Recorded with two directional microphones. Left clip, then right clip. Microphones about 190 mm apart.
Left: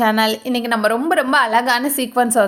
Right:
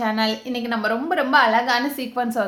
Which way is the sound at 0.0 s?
50° left (ahead or behind).